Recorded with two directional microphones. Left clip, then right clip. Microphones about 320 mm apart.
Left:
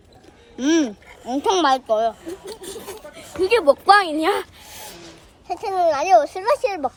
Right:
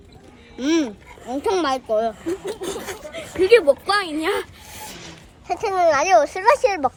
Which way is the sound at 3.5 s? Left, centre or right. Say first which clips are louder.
Left 1 dB; centre.